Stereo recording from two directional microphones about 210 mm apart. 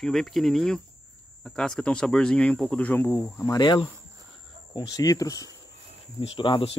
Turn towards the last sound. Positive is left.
turn(degrees=25)  # may be behind; listen again after turning